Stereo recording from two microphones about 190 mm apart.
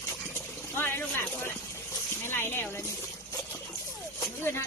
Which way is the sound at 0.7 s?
10° left (ahead or behind).